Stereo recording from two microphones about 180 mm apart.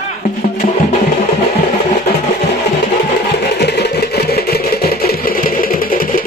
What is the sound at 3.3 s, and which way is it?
Sewing machine, 65° left (ahead or behind).